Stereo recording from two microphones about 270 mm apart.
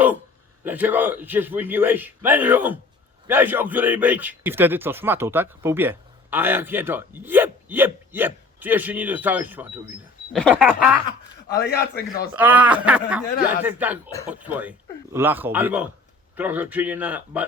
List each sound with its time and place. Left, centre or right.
0.6 s a man's voice: centre
11.6 s a man's voice: left
12.3 s a man's voice: centre